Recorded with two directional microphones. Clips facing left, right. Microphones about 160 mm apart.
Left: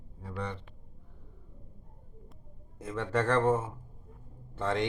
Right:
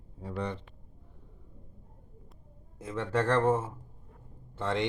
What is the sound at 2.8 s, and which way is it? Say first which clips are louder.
Speech: even; 10° right (ahead or behind).